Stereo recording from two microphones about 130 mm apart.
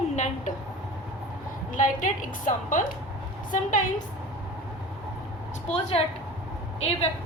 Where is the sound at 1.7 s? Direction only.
90° left.